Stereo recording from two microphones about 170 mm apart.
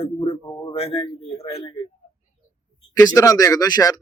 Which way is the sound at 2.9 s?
20° left (ahead or behind).